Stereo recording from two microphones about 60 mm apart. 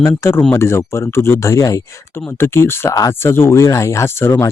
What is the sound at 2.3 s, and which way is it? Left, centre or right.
Speech, left.